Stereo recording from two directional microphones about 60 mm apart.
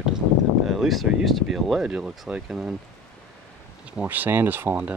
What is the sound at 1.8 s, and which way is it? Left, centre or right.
Speech, centre.